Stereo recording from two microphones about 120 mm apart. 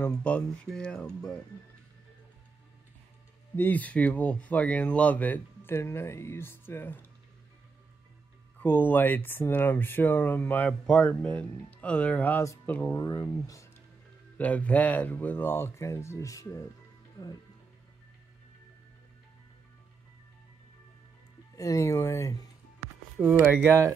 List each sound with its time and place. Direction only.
0.0 s speech: 10° left (ahead or behind)
3.5 s speech: 15° left (ahead or behind)
8.5 s speech: 15° left (ahead or behind)
14.4 s speech: 10° left (ahead or behind)
21.5 s speech: 25° left (ahead or behind)
23.1 s speech: 15° right (ahead or behind)